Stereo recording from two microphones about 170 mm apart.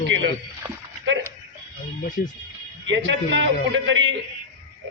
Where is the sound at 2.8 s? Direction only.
90° right.